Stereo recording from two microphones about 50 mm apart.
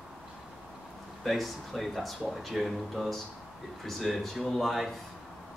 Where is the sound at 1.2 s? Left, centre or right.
Centre.